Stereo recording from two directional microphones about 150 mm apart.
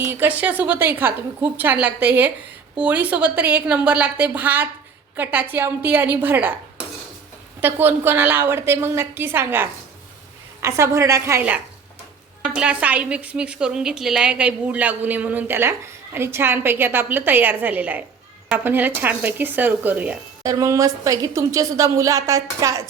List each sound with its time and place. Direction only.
0.0 s a woman's voice: 15° right (ahead or behind)
20.4 s a woman's voice: 25° right (ahead or behind)